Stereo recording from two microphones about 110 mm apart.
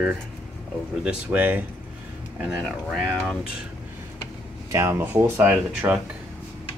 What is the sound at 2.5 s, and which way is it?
Speech, 5° right (ahead or behind).